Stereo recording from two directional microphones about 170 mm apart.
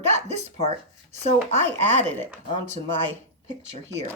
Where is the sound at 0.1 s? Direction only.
40° right (ahead or behind).